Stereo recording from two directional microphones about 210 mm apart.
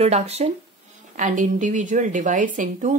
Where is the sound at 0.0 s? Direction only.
30° right (ahead or behind).